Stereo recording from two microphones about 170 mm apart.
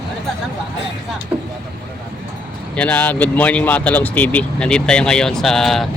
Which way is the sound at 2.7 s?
10° left (ahead or behind).